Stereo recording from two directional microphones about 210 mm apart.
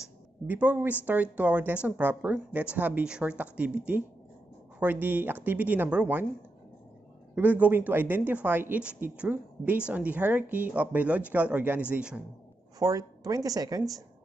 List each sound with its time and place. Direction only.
0.5 s a woman's voice: 10° right (ahead or behind)
5.0 s a woman's voice: 10° right (ahead or behind)
7.3 s a woman's voice: 10° right (ahead or behind)
12.7 s a woman's voice: 15° right (ahead or behind)